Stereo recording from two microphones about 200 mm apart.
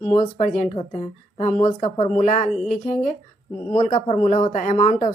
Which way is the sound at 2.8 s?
35° left (ahead or behind).